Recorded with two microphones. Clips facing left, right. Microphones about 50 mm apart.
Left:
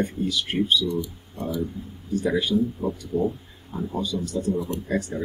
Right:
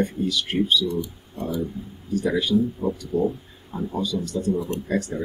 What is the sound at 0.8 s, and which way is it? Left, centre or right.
Speech, right.